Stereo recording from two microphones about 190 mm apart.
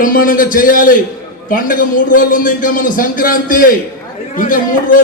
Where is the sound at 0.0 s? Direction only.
45° left (ahead or behind).